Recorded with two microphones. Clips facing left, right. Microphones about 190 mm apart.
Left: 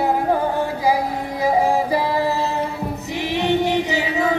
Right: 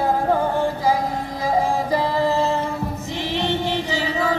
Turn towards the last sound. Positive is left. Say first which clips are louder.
# left 2 dB
turn(degrees=20)  # may be behind; listen again after turning